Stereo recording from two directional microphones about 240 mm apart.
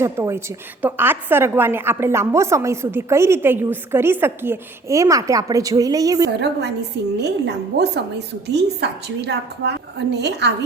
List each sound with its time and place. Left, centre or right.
0.0 s a woman's voice: centre
7.2 s a woman's voice: right